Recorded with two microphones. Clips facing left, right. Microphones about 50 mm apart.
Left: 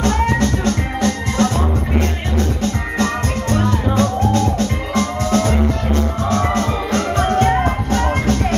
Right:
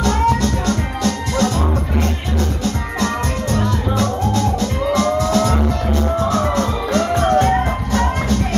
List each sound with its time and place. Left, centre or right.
0.0 s music: left
3.0 s music: left